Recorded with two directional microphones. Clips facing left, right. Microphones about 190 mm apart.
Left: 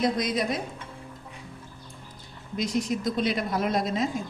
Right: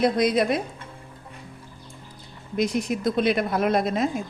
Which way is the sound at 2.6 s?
60° right (ahead or behind).